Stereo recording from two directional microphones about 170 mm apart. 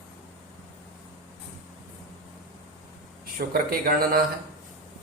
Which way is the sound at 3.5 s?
65° right (ahead or behind).